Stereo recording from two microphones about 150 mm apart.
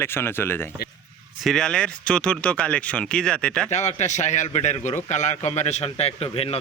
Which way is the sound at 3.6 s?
50° left (ahead or behind).